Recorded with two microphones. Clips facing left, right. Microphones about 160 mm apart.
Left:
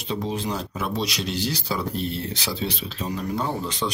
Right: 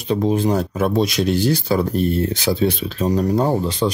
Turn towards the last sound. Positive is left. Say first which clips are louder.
# right 9 dB
turn(degrees=-40)  # may be behind; listen again after turning